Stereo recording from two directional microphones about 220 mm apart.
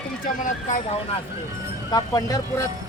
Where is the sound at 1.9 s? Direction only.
15° left (ahead or behind).